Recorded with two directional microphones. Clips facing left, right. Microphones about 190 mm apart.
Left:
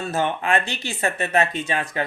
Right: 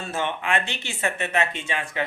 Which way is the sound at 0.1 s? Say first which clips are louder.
Left 3 dB; 40° left (ahead or behind).